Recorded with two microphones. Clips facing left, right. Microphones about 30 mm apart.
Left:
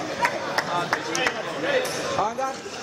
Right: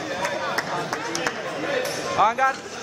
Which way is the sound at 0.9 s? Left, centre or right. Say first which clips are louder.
Left 2 dB; left.